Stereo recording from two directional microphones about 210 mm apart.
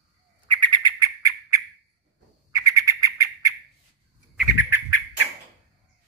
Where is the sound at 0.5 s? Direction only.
20° right (ahead or behind).